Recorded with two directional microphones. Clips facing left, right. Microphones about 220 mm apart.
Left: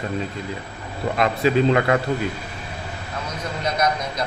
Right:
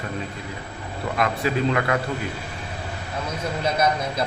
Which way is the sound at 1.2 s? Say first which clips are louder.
Left 5 dB; 25° left (ahead or behind).